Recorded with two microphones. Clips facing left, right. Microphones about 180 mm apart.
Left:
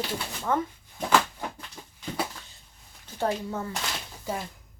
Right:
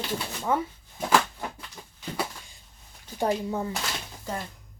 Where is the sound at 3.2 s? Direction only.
15° right (ahead or behind).